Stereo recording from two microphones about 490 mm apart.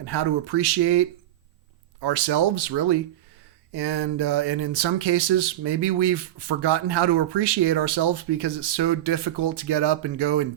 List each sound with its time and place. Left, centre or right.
0.0 s speech: right